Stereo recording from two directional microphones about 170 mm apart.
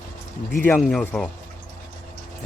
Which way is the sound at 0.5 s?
10° left (ahead or behind).